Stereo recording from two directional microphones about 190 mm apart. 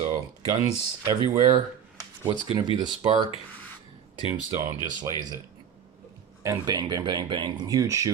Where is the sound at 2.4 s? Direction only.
25° right (ahead or behind).